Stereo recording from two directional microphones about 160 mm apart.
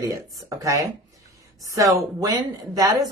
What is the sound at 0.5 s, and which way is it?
Speech, 20° right (ahead or behind).